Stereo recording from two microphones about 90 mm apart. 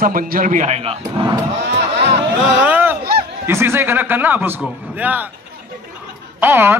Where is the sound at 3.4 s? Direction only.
25° right (ahead or behind).